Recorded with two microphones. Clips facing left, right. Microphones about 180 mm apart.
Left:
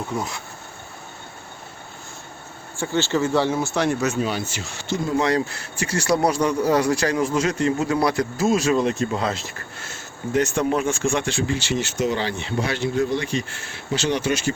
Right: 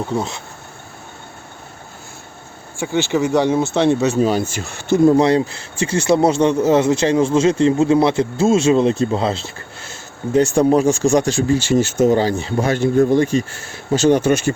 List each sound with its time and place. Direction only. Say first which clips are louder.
0.1 s speech: right 5 dB; 25° right (ahead or behind)
2.7 s speech: right 4 dB; 15° right (ahead or behind); by 5.1 s 55° right (ahead or behind)
5.1 s speech: right 6 dB; 30° right (ahead or behind); by 14.5 s 50° right (ahead or behind)